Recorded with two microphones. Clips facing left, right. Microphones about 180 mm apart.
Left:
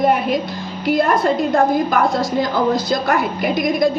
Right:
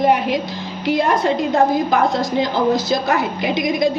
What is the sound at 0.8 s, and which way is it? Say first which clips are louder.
Speech: left 1 dB; 50° left (ahead or behind).